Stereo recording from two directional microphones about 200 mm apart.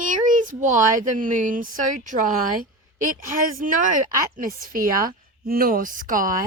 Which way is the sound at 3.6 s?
40° right (ahead or behind).